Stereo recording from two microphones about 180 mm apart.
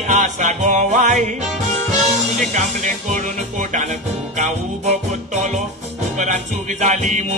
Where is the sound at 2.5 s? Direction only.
45° right (ahead or behind).